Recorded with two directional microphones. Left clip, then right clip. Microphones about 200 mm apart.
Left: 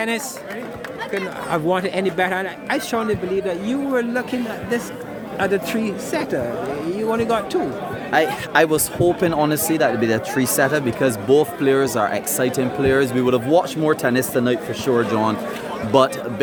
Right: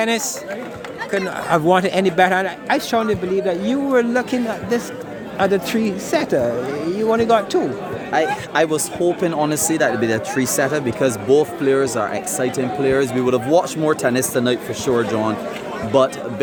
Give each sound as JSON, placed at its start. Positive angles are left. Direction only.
{"t": 1.5, "sound": "a man's voice", "side_deg": -35}
{"t": 8.1, "sound": "speech", "side_deg": 15}